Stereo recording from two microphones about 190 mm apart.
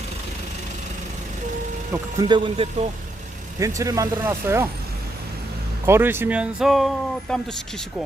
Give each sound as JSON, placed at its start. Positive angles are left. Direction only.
{"t": 1.9, "sound": "speech", "side_deg": -20}
{"t": 5.8, "sound": "speech", "side_deg": -10}